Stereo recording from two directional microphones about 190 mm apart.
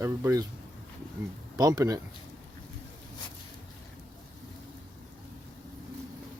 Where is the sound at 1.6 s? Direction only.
20° right (ahead or behind).